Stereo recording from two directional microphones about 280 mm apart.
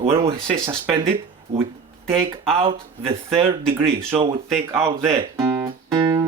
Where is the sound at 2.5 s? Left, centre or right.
Centre.